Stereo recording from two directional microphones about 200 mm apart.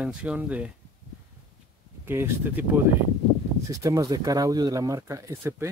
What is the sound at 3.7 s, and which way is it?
Speech, 15° right (ahead or behind).